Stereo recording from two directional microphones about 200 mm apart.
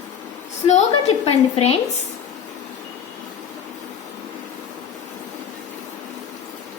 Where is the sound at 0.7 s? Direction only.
30° left (ahead or behind).